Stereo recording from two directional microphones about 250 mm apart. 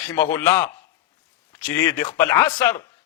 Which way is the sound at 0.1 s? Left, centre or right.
Centre.